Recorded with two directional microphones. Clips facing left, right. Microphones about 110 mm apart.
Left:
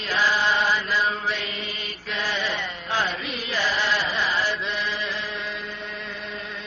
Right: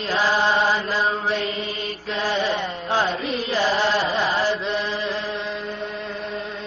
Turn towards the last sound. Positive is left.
turn(degrees=-40)  # may be behind; listen again after turning